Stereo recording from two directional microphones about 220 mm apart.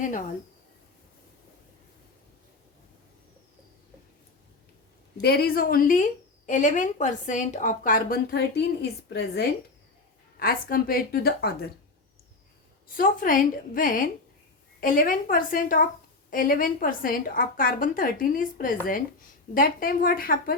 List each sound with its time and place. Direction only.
5.2 s a woman's voice: 45° left (ahead or behind)
12.9 s a woman's voice: 40° left (ahead or behind)